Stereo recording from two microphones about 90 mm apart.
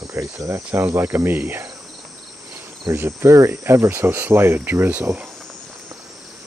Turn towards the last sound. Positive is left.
turn(degrees=-20)  # may be behind; listen again after turning